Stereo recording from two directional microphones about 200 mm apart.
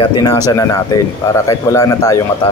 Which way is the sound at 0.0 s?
20° left (ahead or behind).